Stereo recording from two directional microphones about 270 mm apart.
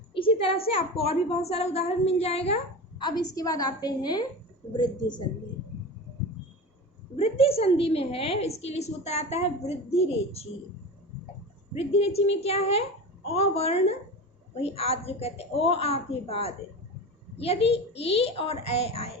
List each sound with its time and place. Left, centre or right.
0.1 s a woman's voice: centre
7.2 s a woman's voice: left
11.9 s a woman's voice: left